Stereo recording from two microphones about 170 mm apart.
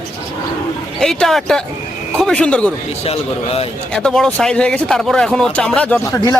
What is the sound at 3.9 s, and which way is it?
Speech, 5° left (ahead or behind).